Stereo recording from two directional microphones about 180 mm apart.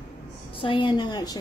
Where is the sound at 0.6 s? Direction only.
30° left (ahead or behind).